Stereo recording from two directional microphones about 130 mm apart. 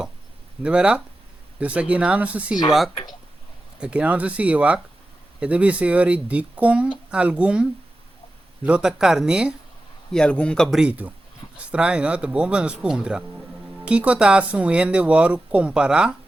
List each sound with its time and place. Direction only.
0.6 s speech: 10° right (ahead or behind)
10.1 s speech: 5° left (ahead or behind)